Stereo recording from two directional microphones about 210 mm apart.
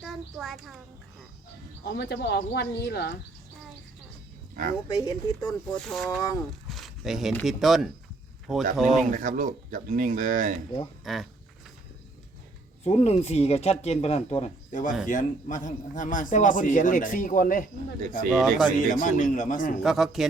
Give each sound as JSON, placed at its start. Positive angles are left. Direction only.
{"t": 0.0, "sound": "a child's voice", "side_deg": 0}
{"t": 1.8, "sound": "speech", "side_deg": 50}
{"t": 4.9, "sound": "speech", "side_deg": 15}
{"t": 5.6, "sound": "speech", "side_deg": 0}
{"t": 9.0, "sound": "speech", "side_deg": -40}
{"t": 11.0, "sound": "speech", "side_deg": 0}
{"t": 12.8, "sound": "a man's voice", "side_deg": 30}
{"t": 18.3, "sound": "speech", "side_deg": 0}
{"t": 18.9, "sound": "a man's voice", "side_deg": 40}
{"t": 19.8, "sound": "speech", "side_deg": 0}